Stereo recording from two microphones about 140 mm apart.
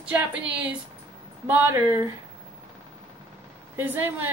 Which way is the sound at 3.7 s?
15° right (ahead or behind).